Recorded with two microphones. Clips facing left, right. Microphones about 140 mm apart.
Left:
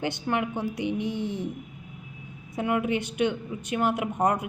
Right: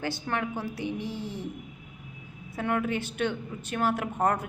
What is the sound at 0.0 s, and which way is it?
A woman's voice, 15° left (ahead or behind).